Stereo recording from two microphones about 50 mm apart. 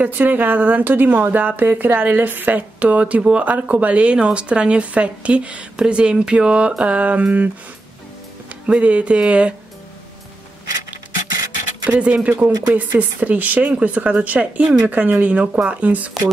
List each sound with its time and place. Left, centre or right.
0.0 s speech: right
3.4 s speech: right
8.6 s speech: right
11.8 s speech: right